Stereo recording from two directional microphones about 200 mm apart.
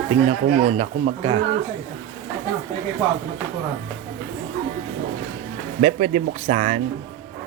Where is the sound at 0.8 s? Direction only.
35° right (ahead or behind).